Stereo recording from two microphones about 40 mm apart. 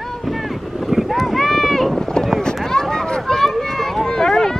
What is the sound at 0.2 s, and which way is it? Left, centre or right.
Boat, centre.